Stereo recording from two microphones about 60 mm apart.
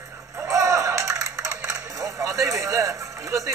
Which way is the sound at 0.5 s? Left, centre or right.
Right.